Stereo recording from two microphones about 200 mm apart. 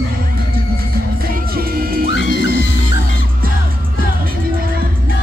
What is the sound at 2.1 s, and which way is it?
Music, 60° left (ahead or behind).